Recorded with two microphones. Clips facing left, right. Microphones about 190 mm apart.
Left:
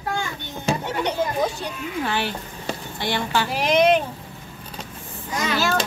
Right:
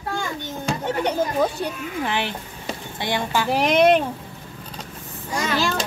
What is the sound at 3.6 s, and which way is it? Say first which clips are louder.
Speech: right 1 dB; 60° right (ahead or behind).